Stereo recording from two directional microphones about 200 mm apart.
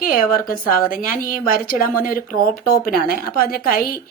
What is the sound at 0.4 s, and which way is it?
A woman's voice, 45° left (ahead or behind).